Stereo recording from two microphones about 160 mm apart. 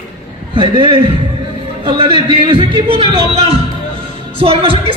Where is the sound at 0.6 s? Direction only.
30° right (ahead or behind).